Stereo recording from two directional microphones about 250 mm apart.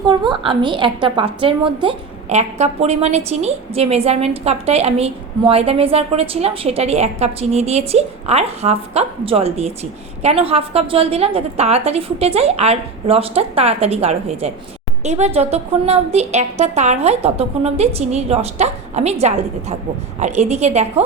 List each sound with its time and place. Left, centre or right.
0.1 s a woman's voice: centre
20.1 s a woman's voice: right